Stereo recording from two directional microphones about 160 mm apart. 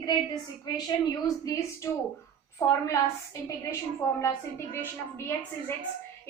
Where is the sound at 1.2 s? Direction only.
20° left (ahead or behind).